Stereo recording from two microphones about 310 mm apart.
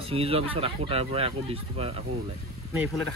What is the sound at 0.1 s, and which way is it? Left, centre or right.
Speech, centre.